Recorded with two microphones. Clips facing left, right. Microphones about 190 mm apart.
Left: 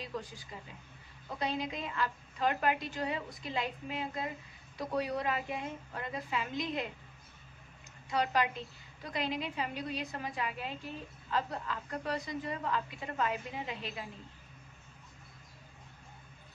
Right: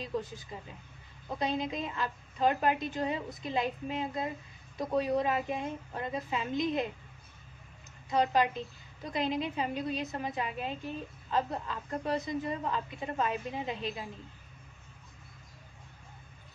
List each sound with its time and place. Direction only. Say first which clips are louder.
0.0 s a woman's voice: right 5 dB; 25° right (ahead or behind)
8.1 s a woman's voice: right 4 dB; 20° right (ahead or behind)